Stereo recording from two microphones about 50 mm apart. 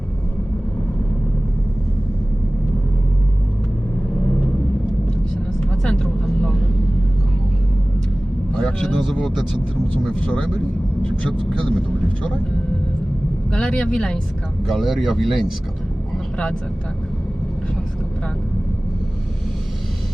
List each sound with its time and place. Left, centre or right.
5.3 s vehicle: centre
8.5 s vehicle: centre
9.2 s speech: centre
13.5 s speech: centre
14.7 s speech: centre
16.1 s vehicle: centre